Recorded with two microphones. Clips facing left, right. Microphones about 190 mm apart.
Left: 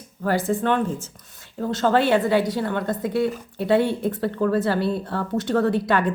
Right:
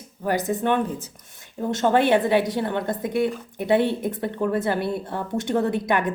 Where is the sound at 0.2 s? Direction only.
20° right (ahead or behind).